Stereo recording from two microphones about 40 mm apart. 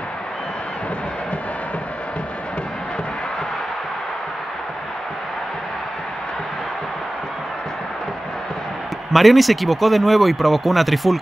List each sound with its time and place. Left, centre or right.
9.1 s speech: centre